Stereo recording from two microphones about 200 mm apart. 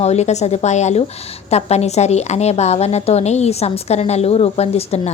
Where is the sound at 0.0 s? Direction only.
35° left (ahead or behind).